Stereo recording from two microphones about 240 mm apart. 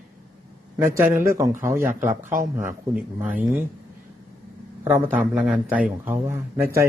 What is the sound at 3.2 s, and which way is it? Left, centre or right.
Speech, centre.